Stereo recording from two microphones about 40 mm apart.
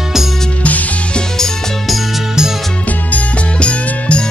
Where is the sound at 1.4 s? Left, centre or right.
Centre.